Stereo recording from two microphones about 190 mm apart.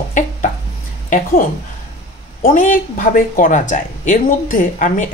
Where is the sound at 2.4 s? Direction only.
45° left (ahead or behind).